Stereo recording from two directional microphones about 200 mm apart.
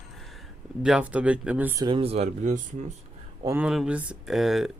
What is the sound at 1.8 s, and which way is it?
Speech, 25° right (ahead or behind).